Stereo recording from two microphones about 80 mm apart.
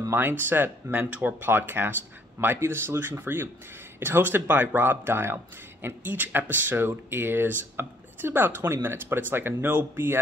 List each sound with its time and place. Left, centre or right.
0.1 s speech: right